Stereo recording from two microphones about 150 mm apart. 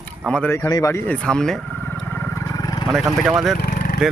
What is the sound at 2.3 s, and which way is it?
Roaring cats, 20° left (ahead or behind).